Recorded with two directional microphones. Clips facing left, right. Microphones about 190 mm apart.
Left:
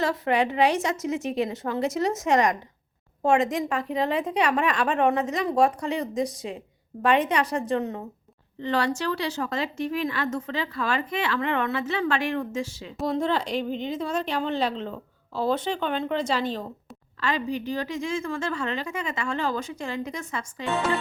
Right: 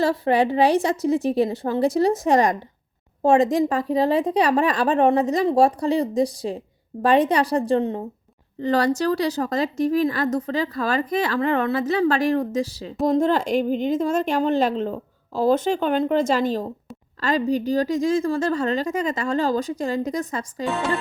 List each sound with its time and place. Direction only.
0.0 s a woman's voice: 30° right (ahead or behind)
20.7 s music: centre (ahead or behind)